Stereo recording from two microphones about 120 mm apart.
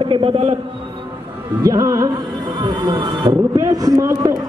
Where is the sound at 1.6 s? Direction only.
25° right (ahead or behind).